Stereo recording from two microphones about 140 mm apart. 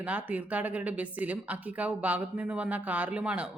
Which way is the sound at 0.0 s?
10° right (ahead or behind).